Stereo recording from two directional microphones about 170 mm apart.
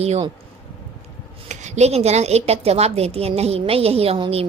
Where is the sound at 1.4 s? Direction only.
40° right (ahead or behind).